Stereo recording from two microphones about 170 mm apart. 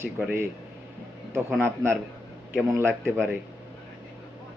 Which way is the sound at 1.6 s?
15° right (ahead or behind).